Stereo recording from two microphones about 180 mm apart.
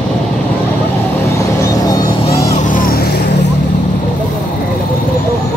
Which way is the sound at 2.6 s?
50° left (ahead or behind).